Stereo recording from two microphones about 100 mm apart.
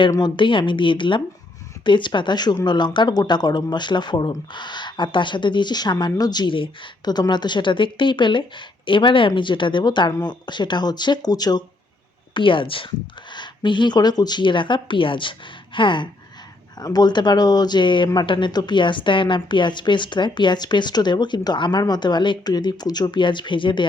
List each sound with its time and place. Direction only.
0.2 s speech: 55° left (ahead or behind)
12.3 s speech: 55° left (ahead or behind)
13.3 s speech: 50° left (ahead or behind)
16.8 s speech: 45° left (ahead or behind)